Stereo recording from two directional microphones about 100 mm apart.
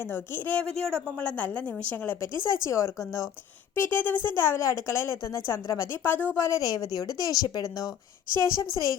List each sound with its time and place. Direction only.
0.1 s a woman's voice: 20° left (ahead or behind)
0.8 s a woman's voice: 5° left (ahead or behind)
2.6 s speech: 30° left (ahead or behind)
3.8 s a woman's voice: 20° left (ahead or behind); by 9.0 s 35° left (ahead or behind)